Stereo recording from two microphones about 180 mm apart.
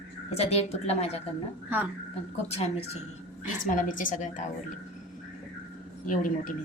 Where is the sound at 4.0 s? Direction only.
45° left (ahead or behind).